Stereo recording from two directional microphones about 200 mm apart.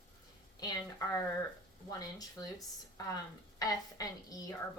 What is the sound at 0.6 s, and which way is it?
Speech, 15° left (ahead or behind).